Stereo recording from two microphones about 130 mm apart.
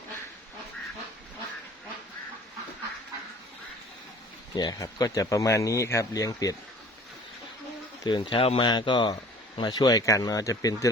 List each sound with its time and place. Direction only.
4.5 s speech: 30° left (ahead or behind)
8.0 s speech: 35° left (ahead or behind)